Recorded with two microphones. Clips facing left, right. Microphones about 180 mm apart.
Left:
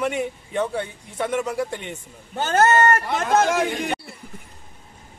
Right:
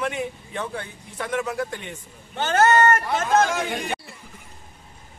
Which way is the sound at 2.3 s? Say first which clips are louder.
Left 1 dB; 40° left (ahead or behind).